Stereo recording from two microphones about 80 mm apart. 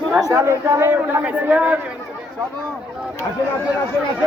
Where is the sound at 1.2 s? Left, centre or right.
Centre.